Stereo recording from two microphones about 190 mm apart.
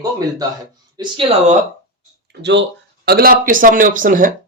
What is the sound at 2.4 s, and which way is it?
Speech, 65° right (ahead or behind).